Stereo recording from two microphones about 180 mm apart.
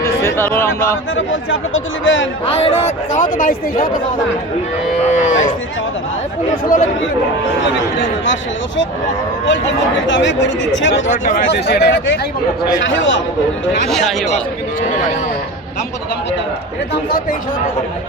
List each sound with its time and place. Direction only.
0.0 s speech: 15° left (ahead or behind)
1.1 s a man's voice: 90° left
2.5 s a man's voice: 35° left (ahead or behind); by 3.8 s 50° left (ahead or behind)
6.5 s speech: 50° left (ahead or behind)
9.5 s speech: 85° left
11.1 s speech: 45° left (ahead or behind)
11.4 s speech: 65° left (ahead or behind)
12.8 s a man's voice: 90° left